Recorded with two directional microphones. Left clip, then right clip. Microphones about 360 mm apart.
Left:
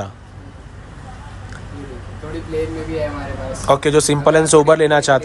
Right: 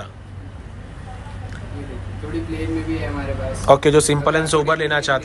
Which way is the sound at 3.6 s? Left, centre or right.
Centre.